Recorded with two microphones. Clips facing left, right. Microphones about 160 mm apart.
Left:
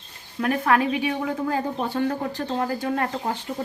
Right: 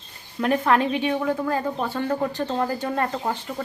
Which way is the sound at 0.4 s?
5° left (ahead or behind).